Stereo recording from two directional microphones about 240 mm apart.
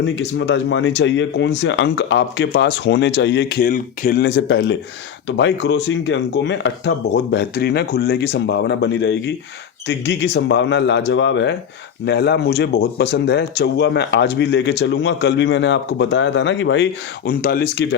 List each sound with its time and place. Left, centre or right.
0.0 s speech: left